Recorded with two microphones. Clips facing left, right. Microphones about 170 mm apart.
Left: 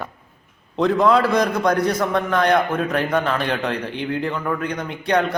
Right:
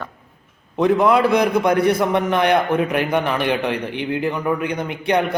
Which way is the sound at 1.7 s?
60° right (ahead or behind).